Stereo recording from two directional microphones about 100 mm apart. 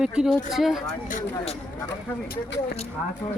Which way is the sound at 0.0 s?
5° right (ahead or behind).